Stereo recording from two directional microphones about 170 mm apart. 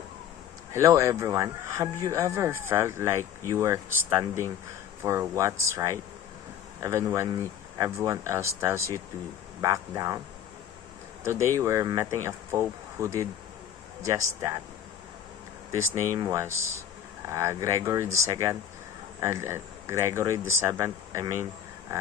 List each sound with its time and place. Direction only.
0.7 s speech: 20° right (ahead or behind)
11.5 s speech: 15° right (ahead or behind)
15.7 s speech: 15° right (ahead or behind)